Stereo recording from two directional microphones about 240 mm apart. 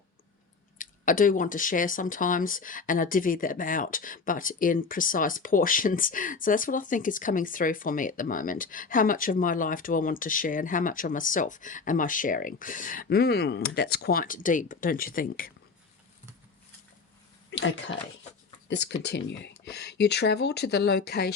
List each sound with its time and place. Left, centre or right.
0.8 s speech: left
17.5 s speech: left